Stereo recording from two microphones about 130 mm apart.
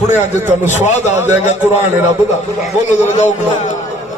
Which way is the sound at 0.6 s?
65° left (ahead or behind).